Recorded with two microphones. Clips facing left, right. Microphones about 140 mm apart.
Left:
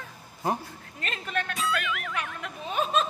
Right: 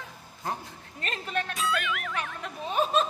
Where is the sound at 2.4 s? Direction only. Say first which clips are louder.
Right 3 dB; 35° right (ahead or behind).